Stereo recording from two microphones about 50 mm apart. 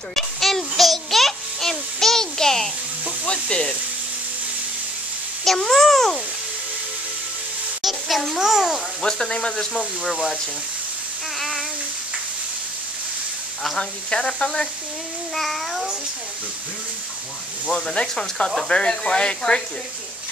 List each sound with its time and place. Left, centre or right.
0.1 s a sound: centre
3.3 s frying: centre
5.4 s a child's voice: centre
7.8 s a child's voice: centre
9.0 s speech: centre
11.3 s child singing: centre
13.7 s speech: centre
15.3 s babbling: centre
17.6 s speech: centre